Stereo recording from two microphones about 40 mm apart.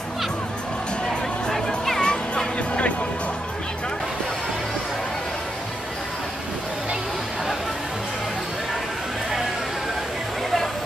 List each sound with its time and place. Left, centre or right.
2.0 s music: left